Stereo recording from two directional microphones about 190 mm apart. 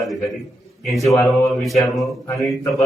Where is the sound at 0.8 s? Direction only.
Centre (ahead or behind).